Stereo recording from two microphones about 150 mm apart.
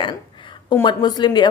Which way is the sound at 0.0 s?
35° left (ahead or behind).